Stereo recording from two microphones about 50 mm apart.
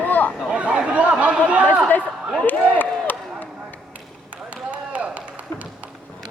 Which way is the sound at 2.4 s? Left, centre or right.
Left.